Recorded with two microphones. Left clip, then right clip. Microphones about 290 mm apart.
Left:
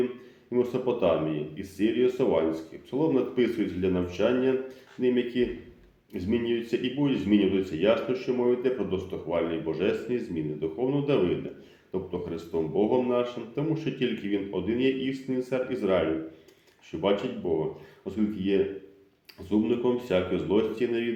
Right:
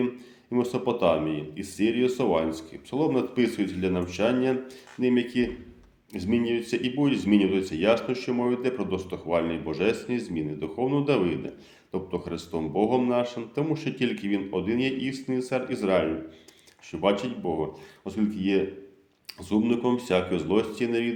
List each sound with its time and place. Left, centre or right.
0.5 s speech: right